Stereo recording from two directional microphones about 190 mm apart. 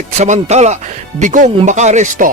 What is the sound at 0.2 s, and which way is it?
Speech, 35° right (ahead or behind).